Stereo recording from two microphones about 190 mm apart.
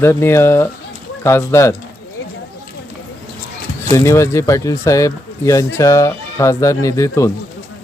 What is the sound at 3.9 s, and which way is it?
Speech, 15° left (ahead or behind).